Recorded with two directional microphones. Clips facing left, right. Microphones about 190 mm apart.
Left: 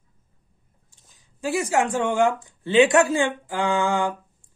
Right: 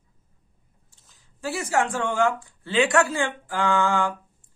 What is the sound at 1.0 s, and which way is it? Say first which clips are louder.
Speech: left 3 dB; 15° left (ahead or behind).